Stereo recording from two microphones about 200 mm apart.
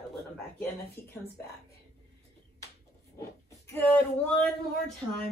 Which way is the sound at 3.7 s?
10° left (ahead or behind).